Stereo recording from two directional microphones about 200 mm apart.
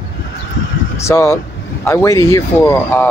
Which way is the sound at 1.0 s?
15° left (ahead or behind).